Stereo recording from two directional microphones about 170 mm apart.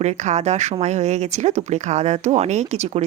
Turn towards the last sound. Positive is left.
turn(degrees=-40)  # may be behind; listen again after turning